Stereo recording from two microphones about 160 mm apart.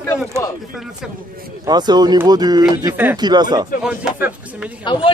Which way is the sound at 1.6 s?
25° right (ahead or behind).